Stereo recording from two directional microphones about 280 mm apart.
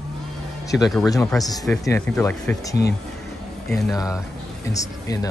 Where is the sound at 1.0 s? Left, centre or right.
Centre.